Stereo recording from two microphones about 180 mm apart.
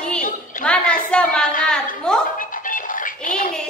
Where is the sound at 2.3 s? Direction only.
50° left (ahead or behind).